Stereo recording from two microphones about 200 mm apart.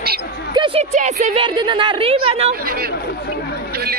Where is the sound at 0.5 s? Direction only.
25° right (ahead or behind).